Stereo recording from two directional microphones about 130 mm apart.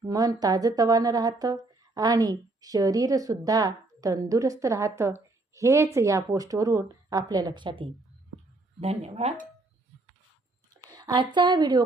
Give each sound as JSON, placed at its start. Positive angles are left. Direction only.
{"t": 0.1, "sound": "speech", "side_deg": -30}
{"t": 8.8, "sound": "speech", "side_deg": -50}
{"t": 10.8, "sound": "a woman's voice", "side_deg": -30}